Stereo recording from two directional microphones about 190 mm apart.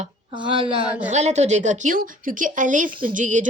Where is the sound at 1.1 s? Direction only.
35° right (ahead or behind).